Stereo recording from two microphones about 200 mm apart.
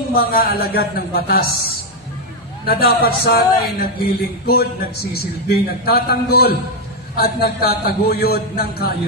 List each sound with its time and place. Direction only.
0.1 s a man's voice: 50° left (ahead or behind)
2.6 s a man's voice: 50° left (ahead or behind)